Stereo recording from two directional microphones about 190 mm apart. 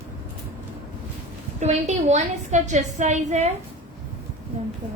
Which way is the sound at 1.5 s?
35° right (ahead or behind).